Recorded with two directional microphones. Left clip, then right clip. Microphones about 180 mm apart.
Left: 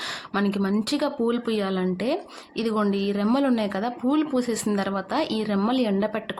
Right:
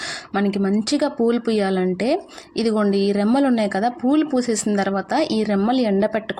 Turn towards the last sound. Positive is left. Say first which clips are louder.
# right 5 dB
turn(degrees=-15)  # may be behind; listen again after turning